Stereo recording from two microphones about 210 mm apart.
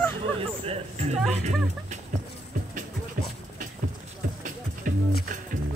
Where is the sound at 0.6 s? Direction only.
30° right (ahead or behind).